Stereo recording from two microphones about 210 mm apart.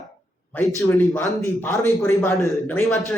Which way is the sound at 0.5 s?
15° left (ahead or behind).